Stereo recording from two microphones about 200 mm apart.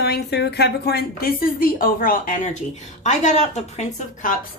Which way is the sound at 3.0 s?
35° left (ahead or behind).